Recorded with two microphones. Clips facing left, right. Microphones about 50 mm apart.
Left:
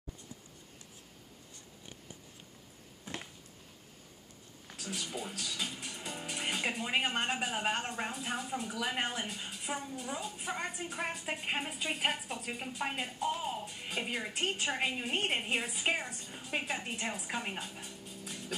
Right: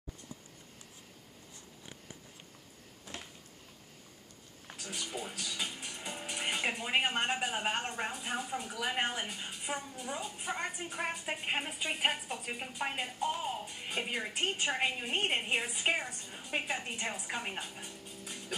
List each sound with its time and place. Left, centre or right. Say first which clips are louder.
4.7 s speech: left 1 dB; centre